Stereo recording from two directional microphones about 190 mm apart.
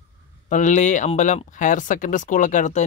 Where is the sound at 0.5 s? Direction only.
40° left (ahead or behind).